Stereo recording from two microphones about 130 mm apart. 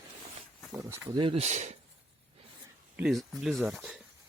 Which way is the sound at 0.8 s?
20° right (ahead or behind).